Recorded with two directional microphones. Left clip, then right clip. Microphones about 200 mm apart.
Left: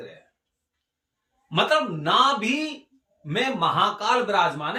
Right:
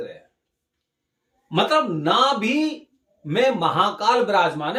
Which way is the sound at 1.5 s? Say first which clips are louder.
Right 2 dB; 15° right (ahead or behind).